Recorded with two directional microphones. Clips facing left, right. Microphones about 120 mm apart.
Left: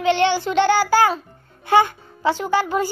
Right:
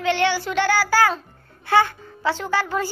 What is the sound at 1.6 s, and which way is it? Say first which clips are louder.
A child's voice: left 2 dB; 15° left (ahead or behind).